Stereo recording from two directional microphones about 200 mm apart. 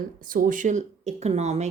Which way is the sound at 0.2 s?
45° right (ahead or behind).